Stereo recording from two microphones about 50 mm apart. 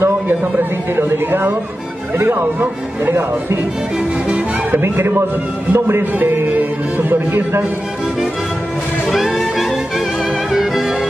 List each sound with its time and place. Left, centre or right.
0.3 s music: right
0.9 s speech: right
2.1 s music: right
3.1 s speech: right
4.7 s speech: right
6.1 s music: right
9.1 s music: centre